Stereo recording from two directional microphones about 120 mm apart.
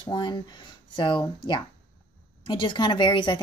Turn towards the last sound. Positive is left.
turn(degrees=40)  # may be behind; listen again after turning